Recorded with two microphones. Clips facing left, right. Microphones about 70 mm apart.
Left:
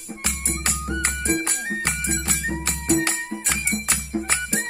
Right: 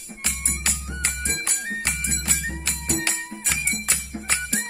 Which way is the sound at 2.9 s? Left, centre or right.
Left.